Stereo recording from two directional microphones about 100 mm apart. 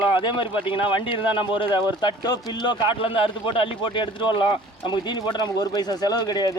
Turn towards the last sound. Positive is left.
turn(degrees=45)  # may be behind; listen again after turning